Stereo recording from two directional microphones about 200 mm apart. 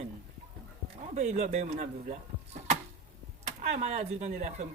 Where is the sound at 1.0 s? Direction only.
35° right (ahead or behind).